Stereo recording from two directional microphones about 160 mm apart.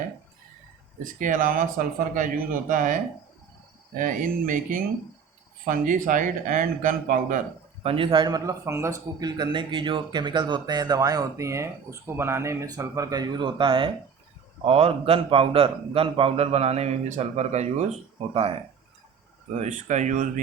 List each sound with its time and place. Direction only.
1.0 s speech: 60° right (ahead or behind)
7.9 s a man's voice: 35° right (ahead or behind)
19.5 s speech: 45° right (ahead or behind)